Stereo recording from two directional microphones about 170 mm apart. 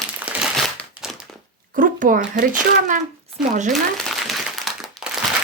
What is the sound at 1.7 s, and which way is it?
A child's voice, 50° right (ahead or behind).